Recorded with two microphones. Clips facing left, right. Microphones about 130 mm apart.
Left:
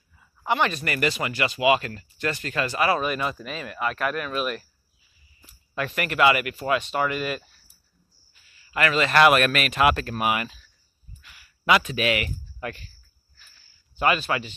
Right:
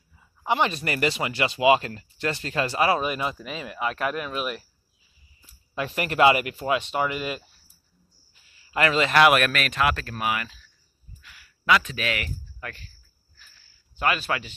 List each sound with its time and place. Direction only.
0.5 s speech: 25° right (ahead or behind)
5.8 s speech: 25° right (ahead or behind)
8.5 s speech: 25° right (ahead or behind)
9.1 s speech: 5° right (ahead or behind)
9.5 s speech: 10° left (ahead or behind)
13.9 s speech: centre (ahead or behind)